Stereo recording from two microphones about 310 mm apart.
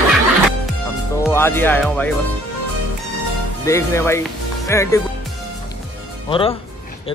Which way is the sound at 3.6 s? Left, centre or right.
Centre.